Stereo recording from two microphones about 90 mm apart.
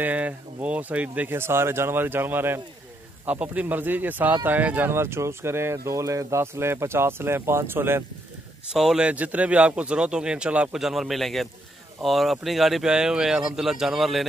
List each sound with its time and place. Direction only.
0.0 s speech: 15° right (ahead or behind)
8.7 s a man's voice: 5° right (ahead or behind)